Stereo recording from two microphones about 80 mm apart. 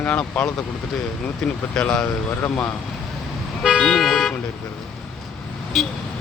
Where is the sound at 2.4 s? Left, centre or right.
Left.